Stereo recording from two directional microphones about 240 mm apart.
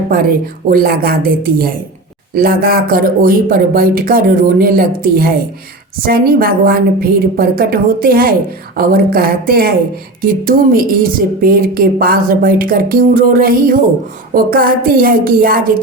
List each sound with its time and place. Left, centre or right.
0.7 s a woman's voice: right